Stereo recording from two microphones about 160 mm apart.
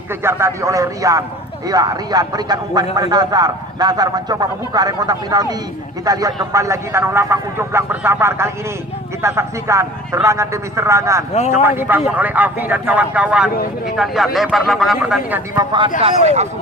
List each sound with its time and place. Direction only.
0.2 s a man's voice: 15° right (ahead or behind)
11.3 s a man's voice: 45° left (ahead or behind)
11.8 s a man's voice: 10° right (ahead or behind)
15.5 s a man's voice: 30° right (ahead or behind)
16.2 s speech: 45° right (ahead or behind)